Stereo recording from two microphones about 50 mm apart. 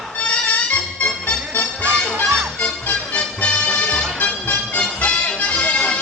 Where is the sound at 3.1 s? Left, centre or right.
Left.